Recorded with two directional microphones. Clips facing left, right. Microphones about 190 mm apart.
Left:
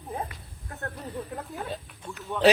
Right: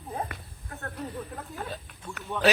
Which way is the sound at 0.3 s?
60° right (ahead or behind).